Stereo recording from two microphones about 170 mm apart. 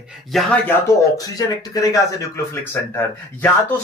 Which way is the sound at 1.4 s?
20° left (ahead or behind).